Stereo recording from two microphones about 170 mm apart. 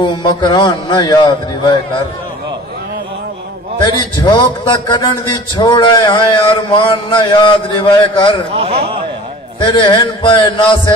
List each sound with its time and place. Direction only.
0.0 s a man's voice: 25° left (ahead or behind)
3.8 s a man's voice: 25° left (ahead or behind)
8.5 s a man's voice: 35° right (ahead or behind)
9.6 s a man's voice: 30° left (ahead or behind)